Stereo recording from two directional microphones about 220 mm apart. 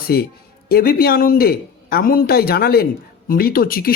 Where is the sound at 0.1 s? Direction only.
45° left (ahead or behind).